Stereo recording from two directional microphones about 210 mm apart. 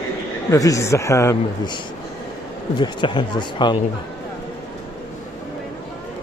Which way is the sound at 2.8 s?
20° left (ahead or behind).